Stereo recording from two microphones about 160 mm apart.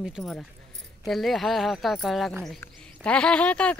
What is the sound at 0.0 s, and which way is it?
A woman's voice, centre (ahead or behind).